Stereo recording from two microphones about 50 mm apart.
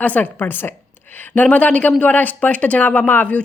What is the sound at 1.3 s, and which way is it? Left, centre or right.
Speech, left.